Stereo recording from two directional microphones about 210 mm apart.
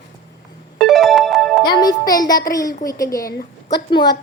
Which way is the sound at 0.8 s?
Centre (ahead or behind).